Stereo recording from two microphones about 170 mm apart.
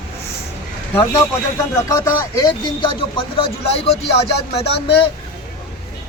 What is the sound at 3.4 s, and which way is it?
Speech, 30° left (ahead or behind).